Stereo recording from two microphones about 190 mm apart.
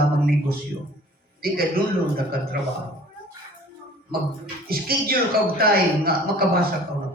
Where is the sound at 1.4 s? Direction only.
50° right (ahead or behind).